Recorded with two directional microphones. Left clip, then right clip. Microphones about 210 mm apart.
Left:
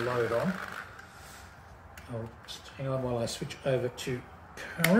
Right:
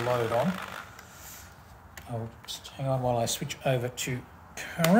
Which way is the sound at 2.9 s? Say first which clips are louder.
Right 5 dB; 60° right (ahead or behind).